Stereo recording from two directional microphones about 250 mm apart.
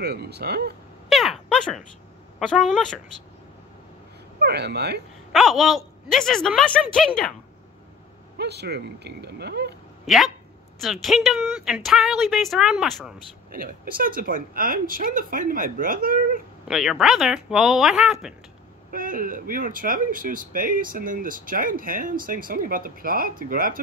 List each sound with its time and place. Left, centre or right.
0.0 s speech: right
1.0 s a sound: centre
2.3 s speech: centre
4.4 s speech: right
5.3 s speech: centre
8.4 s speech: right
10.0 s speech: centre
13.5 s speech: right
16.6 s speech: centre
18.9 s speech: right